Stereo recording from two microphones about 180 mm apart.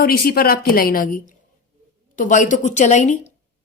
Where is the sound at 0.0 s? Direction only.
55° left (ahead or behind).